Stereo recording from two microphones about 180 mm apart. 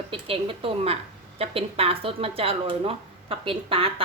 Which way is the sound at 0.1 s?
30° right (ahead or behind).